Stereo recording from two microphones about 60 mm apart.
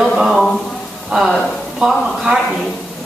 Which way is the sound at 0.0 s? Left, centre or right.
Centre.